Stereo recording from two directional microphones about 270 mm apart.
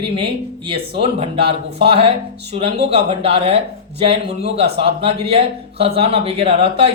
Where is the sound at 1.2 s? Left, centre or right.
Right.